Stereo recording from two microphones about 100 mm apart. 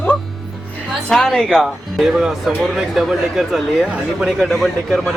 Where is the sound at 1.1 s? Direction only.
5° left (ahead or behind).